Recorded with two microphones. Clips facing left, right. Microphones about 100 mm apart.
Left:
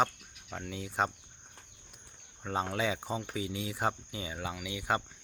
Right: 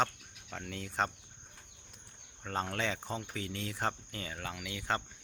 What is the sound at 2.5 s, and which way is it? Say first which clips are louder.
Speech: left 3 dB; 10° left (ahead or behind).